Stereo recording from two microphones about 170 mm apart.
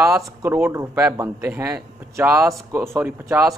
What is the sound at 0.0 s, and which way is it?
Speech, 15° right (ahead or behind).